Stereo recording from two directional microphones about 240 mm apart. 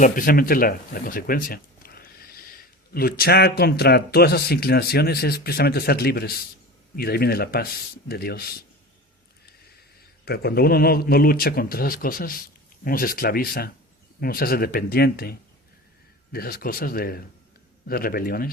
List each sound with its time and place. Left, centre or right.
0.0 s speech: left
10.2 s speech: left